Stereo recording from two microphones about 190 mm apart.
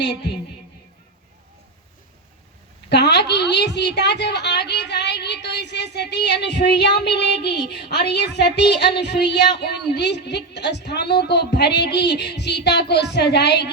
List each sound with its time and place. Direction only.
0.0 s a woman's voice: 65° left (ahead or behind)
2.9 s a woman's voice: 60° left (ahead or behind)